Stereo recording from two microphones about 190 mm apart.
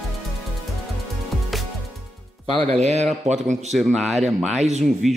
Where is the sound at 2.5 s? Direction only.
35° right (ahead or behind).